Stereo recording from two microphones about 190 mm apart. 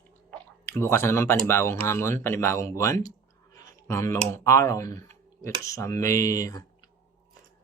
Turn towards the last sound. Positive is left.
turn(degrees=20)  # may be behind; listen again after turning